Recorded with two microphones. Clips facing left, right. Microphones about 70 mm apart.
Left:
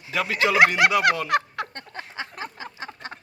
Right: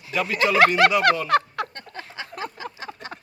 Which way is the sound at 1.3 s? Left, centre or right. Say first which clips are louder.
Right 3 dB; left.